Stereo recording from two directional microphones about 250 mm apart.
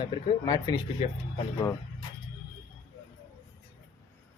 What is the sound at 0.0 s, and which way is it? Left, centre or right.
Speech, centre.